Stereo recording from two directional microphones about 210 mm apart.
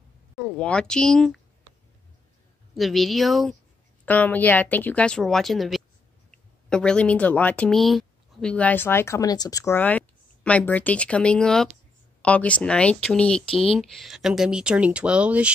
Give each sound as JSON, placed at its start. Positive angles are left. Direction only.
{"t": 0.4, "sound": "speech", "side_deg": 5}
{"t": 2.7, "sound": "speech", "side_deg": 0}